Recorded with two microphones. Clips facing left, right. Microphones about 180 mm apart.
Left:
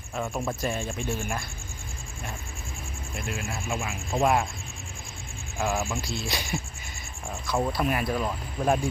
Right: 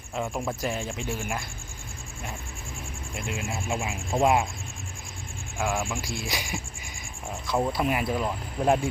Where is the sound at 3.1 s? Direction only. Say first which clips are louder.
Right 1 dB; 15° right (ahead or behind).